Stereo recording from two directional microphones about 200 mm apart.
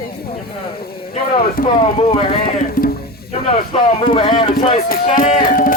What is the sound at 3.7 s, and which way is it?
Speech, 25° left (ahead or behind).